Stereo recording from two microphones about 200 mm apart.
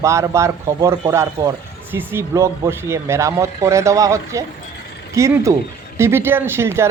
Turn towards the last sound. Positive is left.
turn(degrees=-15)  # may be behind; listen again after turning